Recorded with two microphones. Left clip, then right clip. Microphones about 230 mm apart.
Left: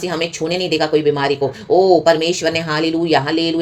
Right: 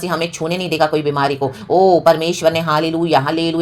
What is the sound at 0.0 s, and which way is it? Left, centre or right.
Speech, centre.